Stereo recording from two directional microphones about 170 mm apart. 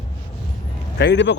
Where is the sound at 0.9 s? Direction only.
85° left.